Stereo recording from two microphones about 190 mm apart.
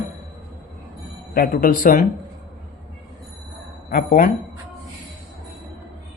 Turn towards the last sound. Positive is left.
turn(degrees=45)  # may be behind; listen again after turning